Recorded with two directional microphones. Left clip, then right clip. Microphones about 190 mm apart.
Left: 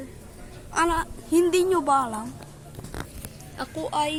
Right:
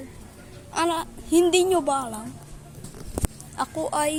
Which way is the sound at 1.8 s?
Centre (ahead or behind).